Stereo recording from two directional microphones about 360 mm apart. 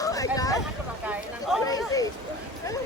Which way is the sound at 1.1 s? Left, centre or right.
Centre.